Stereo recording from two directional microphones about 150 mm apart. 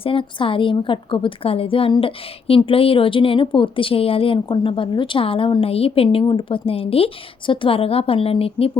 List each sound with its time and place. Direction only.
0.0 s a woman's voice: 35° left (ahead or behind)